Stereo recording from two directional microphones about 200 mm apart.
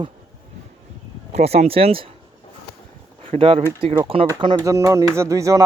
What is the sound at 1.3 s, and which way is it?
Speech, 30° right (ahead or behind).